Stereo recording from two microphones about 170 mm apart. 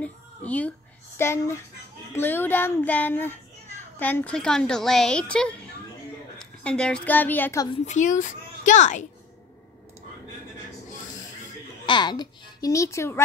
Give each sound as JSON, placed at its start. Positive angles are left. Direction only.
{"t": 0.0, "sound": "a sound", "side_deg": 10}
{"t": 2.1, "sound": "a child's voice", "side_deg": 10}
{"t": 7.8, "sound": "a child's voice", "side_deg": 45}
{"t": 11.8, "sound": "a child's voice", "side_deg": 25}